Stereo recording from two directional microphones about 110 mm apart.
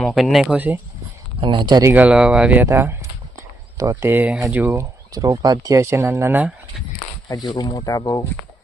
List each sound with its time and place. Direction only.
0.0 s speech: centre (ahead or behind)
0.4 s speech: 15° right (ahead or behind)
1.4 s speech: 45° right (ahead or behind)
1.8 s speech: 15° right (ahead or behind)
7.3 s speech: 35° left (ahead or behind)